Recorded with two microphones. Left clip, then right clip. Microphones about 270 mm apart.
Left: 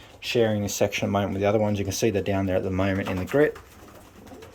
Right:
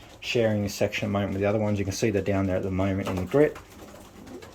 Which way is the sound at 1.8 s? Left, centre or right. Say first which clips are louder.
Left 2 dB; left.